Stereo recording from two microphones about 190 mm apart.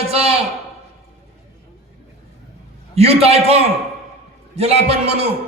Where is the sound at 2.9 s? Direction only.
30° right (ahead or behind).